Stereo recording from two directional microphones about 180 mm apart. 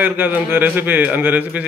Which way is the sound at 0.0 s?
10° right (ahead or behind).